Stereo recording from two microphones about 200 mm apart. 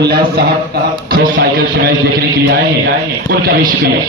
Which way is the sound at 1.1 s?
50° right (ahead or behind).